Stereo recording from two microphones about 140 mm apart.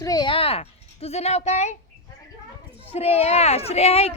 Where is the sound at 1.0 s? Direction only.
50° left (ahead or behind).